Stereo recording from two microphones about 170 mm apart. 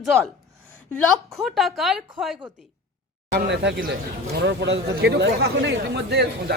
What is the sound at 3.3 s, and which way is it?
Speech, 80° right.